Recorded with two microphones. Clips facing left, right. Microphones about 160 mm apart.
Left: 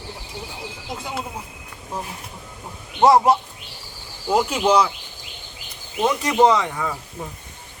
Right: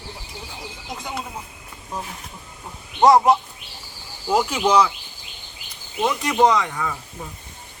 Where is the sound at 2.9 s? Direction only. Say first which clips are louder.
Even; centre (ahead or behind).